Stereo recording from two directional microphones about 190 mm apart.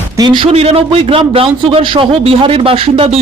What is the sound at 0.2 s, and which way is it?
A man's voice, 25° right (ahead or behind).